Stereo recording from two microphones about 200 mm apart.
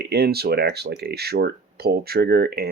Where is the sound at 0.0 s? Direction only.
55° right (ahead or behind).